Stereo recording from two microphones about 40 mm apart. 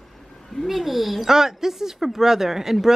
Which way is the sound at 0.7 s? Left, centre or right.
Centre.